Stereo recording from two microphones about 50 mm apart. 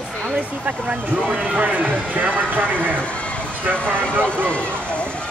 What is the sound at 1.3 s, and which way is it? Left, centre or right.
Speech, right.